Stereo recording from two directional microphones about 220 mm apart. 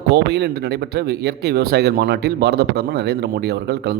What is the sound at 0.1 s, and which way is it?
A man's voice, 50° right (ahead or behind).